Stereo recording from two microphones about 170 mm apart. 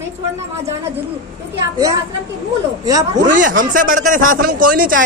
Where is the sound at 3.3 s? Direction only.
50° right (ahead or behind).